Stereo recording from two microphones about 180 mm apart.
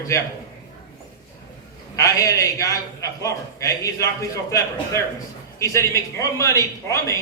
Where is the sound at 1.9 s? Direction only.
15° left (ahead or behind).